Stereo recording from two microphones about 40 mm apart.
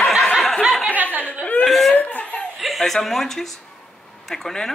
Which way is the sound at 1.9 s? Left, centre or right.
Left.